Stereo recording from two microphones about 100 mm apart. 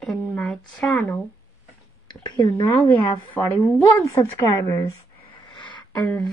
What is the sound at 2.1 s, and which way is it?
Speech, 50° left (ahead or behind).